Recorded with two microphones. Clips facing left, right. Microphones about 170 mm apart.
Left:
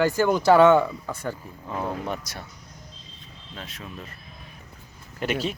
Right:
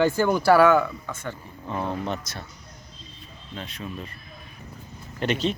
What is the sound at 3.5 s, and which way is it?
Speech, centre (ahead or behind).